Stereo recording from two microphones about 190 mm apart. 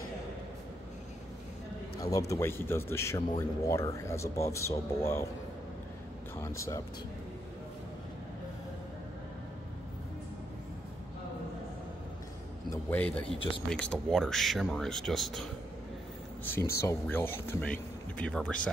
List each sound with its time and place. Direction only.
2.0 s speech: 15° left (ahead or behind)
6.4 s speech: 15° left (ahead or behind)
12.6 s a man's voice: 10° left (ahead or behind)
16.4 s speech: 10° left (ahead or behind)